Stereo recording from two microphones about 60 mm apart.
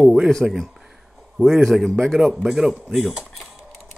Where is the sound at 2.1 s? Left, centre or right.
Centre.